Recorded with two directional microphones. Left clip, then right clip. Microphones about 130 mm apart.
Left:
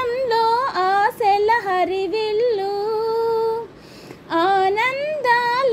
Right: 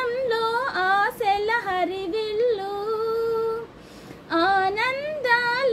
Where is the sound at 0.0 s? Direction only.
35° left (ahead or behind).